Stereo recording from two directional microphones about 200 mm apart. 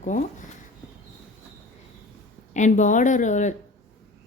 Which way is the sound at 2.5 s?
35° left (ahead or behind).